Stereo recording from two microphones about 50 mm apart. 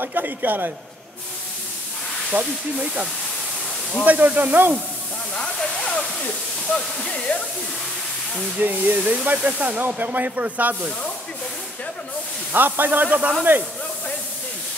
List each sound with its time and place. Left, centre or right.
0.0 s speech: right
2.3 s speech: right
4.0 s speech: right
5.3 s speech: centre
8.5 s speech: right
12.5 s speech: right